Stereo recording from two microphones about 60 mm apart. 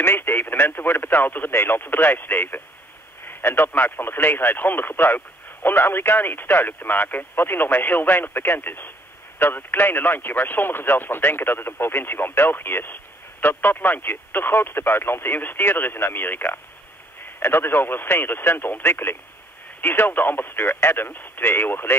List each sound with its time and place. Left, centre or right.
0.0 s speech: left